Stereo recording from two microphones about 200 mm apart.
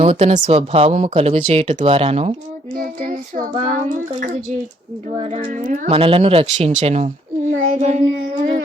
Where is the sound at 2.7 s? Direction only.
45° right (ahead or behind).